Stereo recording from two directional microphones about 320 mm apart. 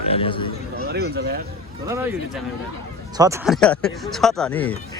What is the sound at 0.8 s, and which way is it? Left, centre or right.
Speech, right.